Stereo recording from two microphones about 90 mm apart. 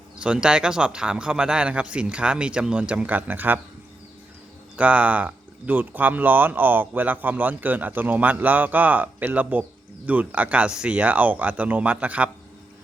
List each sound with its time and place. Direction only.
0.2 s speech: 10° right (ahead or behind)
4.8 s speech: 15° right (ahead or behind)